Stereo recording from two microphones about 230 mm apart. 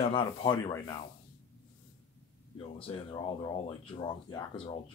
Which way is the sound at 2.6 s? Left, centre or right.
Left.